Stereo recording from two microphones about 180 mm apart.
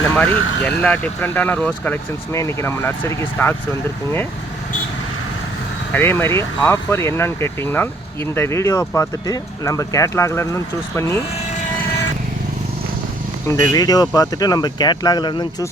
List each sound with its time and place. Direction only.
0.2 s speech: 5° left (ahead or behind)
5.9 s speech: 10° left (ahead or behind)
13.5 s speech: 20° left (ahead or behind)